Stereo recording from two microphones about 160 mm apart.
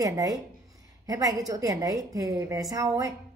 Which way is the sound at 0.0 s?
20° right (ahead or behind).